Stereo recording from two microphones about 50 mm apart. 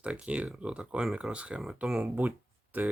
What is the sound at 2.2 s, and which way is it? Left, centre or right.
Speech, right.